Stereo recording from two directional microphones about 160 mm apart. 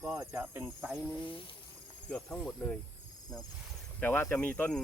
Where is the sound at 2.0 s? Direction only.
5° left (ahead or behind).